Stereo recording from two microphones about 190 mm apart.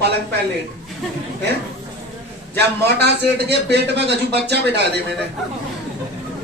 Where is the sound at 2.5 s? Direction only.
60° right (ahead or behind).